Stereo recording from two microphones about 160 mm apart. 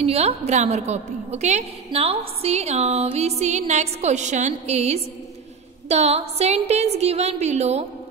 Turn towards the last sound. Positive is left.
turn(degrees=-40)  # may be behind; listen again after turning